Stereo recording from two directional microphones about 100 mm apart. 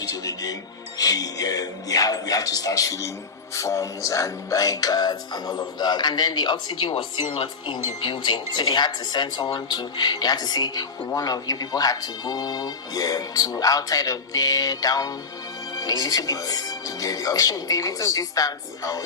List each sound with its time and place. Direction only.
0.0 s speech: 35° left (ahead or behind)